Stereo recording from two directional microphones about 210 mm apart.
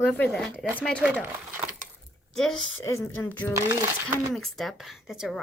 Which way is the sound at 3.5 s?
15° right (ahead or behind).